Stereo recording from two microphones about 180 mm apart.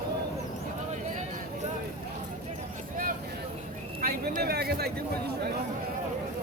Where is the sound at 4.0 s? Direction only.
55° right (ahead or behind).